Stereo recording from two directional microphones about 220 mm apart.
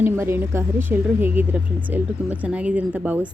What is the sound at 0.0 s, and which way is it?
A woman's voice, 10° right (ahead or behind).